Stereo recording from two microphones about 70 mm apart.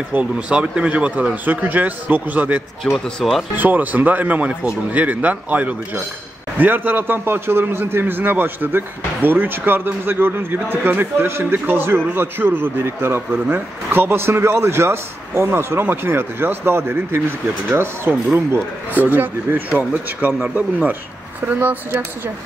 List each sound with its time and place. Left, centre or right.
0.1 s a man's voice: centre
2.8 s speech: centre
3.2 s speech: centre
3.5 s a man's voice: right
21.5 s a man's voice: right